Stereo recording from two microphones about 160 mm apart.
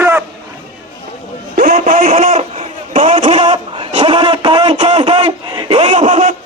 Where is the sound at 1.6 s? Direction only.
60° right (ahead or behind).